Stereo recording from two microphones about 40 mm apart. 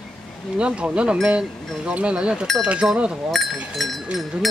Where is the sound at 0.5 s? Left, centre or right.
Right.